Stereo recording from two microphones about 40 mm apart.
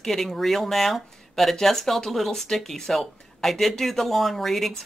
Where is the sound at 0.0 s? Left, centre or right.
Centre.